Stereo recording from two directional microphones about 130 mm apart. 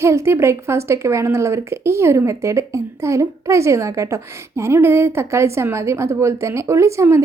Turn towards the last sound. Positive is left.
turn(degrees=-20)  # may be behind; listen again after turning